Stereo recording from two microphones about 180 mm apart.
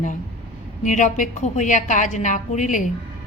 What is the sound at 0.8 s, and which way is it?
A woman's voice, 45° left (ahead or behind).